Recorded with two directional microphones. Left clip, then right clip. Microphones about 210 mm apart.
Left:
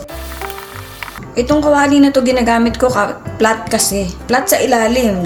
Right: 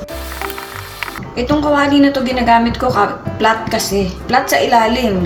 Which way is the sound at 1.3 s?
55° left (ahead or behind).